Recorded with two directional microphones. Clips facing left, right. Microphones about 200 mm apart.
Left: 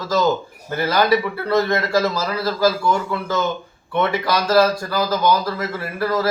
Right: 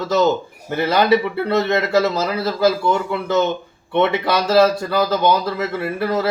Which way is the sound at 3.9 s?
25° right (ahead or behind).